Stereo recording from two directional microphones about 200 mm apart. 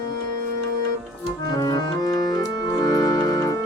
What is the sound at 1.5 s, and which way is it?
Organ, 20° left (ahead or behind).